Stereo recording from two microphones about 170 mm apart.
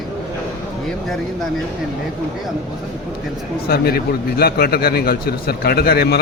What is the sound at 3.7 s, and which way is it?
A man's voice, 65° left (ahead or behind).